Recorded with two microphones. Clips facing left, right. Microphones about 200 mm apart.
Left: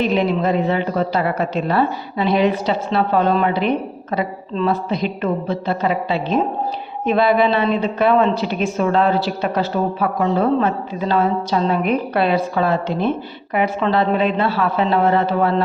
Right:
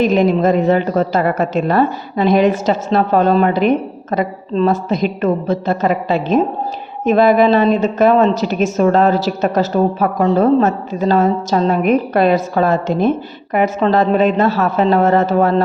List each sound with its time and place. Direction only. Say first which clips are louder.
0.0 s a woman's voice: right 5 dB; 45° right (ahead or behind)